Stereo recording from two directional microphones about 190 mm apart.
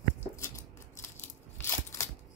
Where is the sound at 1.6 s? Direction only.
15° left (ahead or behind).